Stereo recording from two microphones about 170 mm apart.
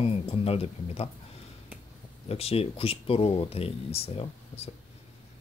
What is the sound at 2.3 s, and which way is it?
Speech, 35° left (ahead or behind).